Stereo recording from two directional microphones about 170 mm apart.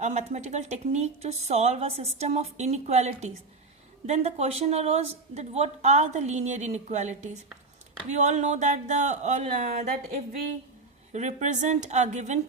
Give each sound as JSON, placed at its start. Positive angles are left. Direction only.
{"t": 0.0, "sound": "a woman's voice", "side_deg": -45}
{"t": 11.1, "sound": "speech", "side_deg": -45}